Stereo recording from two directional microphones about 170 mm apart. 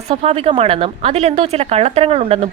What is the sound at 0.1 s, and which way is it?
A woman's voice, 35° right (ahead or behind).